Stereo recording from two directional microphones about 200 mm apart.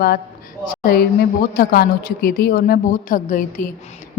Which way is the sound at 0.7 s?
45° left (ahead or behind).